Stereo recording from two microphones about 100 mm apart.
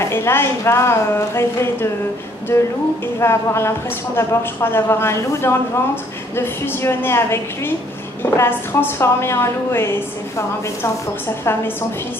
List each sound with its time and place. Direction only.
0.0 s a woman's voice: 25° left (ahead or behind)